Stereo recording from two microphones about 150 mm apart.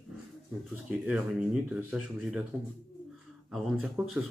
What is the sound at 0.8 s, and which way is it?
Speech, 5° right (ahead or behind).